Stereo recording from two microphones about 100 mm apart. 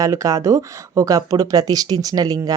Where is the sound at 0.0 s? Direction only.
35° right (ahead or behind).